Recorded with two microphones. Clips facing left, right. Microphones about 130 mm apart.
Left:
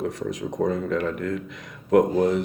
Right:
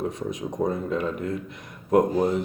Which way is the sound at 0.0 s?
85° left.